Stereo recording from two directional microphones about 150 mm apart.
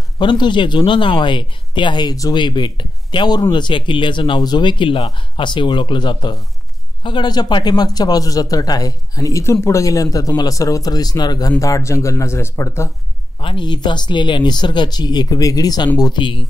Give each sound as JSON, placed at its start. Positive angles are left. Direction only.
{"t": 0.2, "sound": "speech", "side_deg": 30}
{"t": 13.4, "sound": "speech", "side_deg": 35}